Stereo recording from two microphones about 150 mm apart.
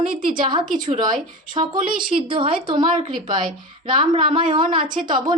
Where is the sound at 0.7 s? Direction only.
60° right (ahead or behind).